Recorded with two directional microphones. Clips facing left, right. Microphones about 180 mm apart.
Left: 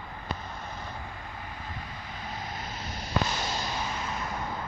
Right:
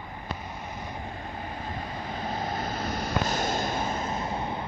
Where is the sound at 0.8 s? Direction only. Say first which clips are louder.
Right 4 dB; 25° right (ahead or behind); by 3.0 s 45° right (ahead or behind).